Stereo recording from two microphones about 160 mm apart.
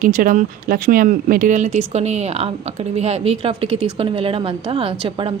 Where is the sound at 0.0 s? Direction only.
60° right (ahead or behind).